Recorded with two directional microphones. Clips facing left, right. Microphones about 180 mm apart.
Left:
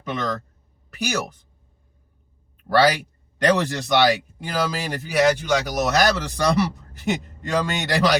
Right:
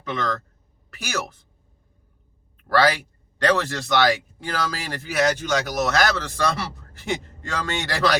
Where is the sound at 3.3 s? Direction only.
20° left (ahead or behind).